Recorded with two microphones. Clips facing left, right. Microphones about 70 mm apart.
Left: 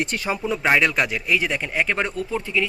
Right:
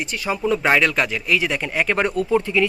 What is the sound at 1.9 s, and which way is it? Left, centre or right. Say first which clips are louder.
Speech: right 7 dB; centre.